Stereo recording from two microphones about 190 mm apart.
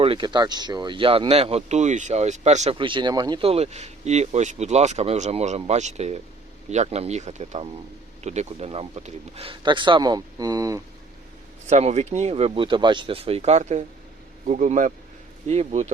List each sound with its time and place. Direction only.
0.0 s speech: 25° right (ahead or behind)
11.6 s speech: 35° right (ahead or behind)